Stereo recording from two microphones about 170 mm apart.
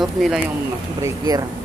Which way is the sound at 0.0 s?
Centre (ahead or behind).